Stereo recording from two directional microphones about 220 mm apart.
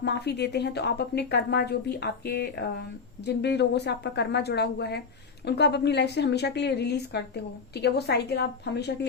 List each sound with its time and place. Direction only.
0.0 s a woman's voice: 50° left (ahead or behind)